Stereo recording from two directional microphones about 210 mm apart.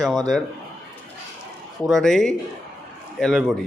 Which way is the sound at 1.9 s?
Centre (ahead or behind).